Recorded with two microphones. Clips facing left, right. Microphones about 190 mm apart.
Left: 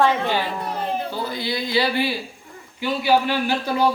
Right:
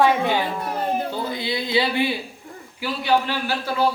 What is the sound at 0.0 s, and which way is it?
A child's voice, 10° right (ahead or behind).